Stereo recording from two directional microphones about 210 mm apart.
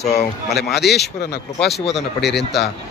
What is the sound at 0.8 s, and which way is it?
Speech, 50° left (ahead or behind).